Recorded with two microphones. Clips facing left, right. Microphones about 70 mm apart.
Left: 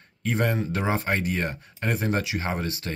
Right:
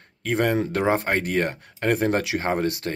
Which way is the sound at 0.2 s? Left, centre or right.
Right.